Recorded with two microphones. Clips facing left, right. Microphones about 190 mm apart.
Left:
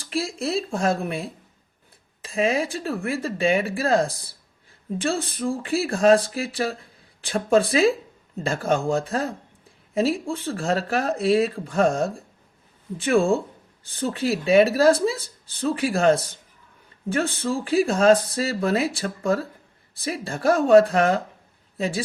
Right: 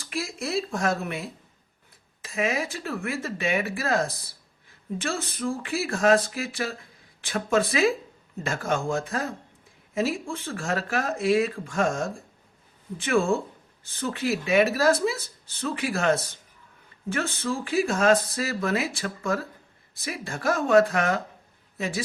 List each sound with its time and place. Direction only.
0.0 s a woman's voice: 30° left (ahead or behind)